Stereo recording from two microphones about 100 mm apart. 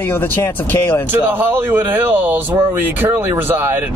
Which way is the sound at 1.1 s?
20° right (ahead or behind).